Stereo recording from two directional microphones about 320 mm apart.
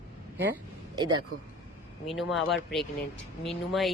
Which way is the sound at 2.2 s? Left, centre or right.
Centre.